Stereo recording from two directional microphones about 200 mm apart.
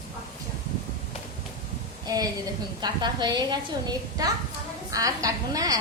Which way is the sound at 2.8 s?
20° right (ahead or behind).